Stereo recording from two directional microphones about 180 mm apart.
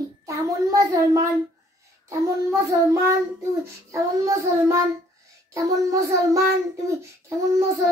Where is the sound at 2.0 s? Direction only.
15° right (ahead or behind).